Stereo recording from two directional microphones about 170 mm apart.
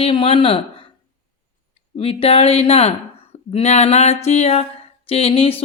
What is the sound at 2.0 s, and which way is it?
Speech, 35° left (ahead or behind).